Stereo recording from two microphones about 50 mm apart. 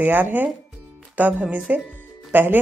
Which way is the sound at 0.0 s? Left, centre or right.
Right.